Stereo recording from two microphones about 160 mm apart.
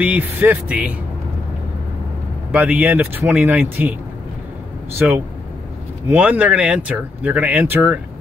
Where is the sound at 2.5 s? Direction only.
10° right (ahead or behind).